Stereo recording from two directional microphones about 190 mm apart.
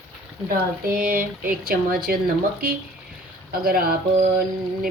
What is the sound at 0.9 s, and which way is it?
A woman's voice, 45° right (ahead or behind).